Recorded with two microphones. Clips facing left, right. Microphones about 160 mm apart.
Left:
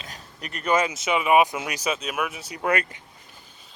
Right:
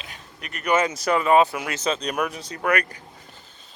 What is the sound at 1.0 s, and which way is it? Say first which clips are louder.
Speech: right 2 dB; 10° left (ahead or behind).